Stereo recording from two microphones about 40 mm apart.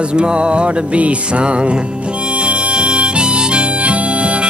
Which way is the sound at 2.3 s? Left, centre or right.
Right.